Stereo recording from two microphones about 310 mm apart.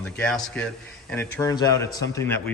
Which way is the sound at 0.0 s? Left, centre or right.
Centre.